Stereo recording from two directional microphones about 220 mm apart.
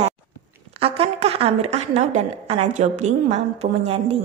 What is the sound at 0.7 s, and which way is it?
A woman's voice, 25° right (ahead or behind).